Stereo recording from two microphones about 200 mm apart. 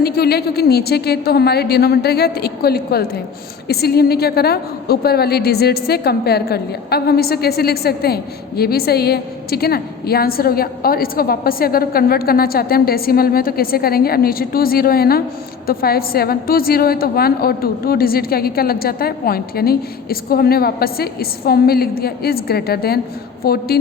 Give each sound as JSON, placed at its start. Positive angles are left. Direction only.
{"t": 0.0, "sound": "a woman's voice", "side_deg": 50}